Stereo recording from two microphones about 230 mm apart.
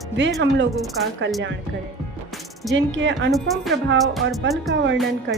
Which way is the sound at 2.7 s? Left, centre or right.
Right.